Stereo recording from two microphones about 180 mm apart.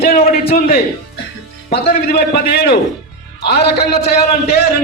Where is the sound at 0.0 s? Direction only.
55° left (ahead or behind).